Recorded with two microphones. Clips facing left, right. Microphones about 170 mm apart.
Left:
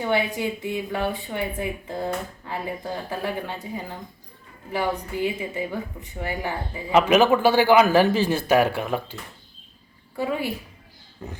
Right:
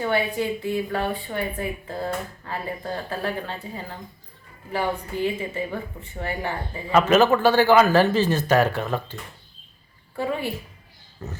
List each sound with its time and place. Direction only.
0.0 s a woman's voice: 15° left (ahead or behind)
10.2 s a woman's voice: 10° left (ahead or behind)